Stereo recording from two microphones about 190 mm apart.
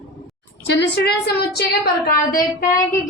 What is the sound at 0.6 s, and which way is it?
A woman's voice, 65° left (ahead or behind).